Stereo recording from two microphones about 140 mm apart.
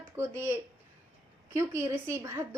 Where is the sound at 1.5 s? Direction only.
20° right (ahead or behind).